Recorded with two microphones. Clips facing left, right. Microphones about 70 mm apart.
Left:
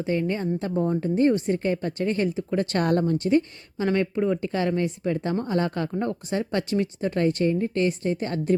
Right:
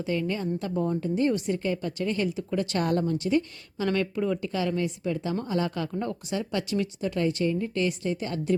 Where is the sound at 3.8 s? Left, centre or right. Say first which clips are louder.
Left 3 dB; left.